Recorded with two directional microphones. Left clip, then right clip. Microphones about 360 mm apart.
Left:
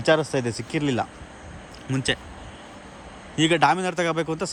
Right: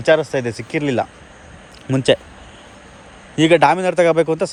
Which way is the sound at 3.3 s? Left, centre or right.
Centre.